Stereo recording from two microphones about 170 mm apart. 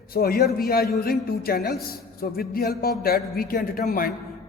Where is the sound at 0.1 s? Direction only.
60° left (ahead or behind).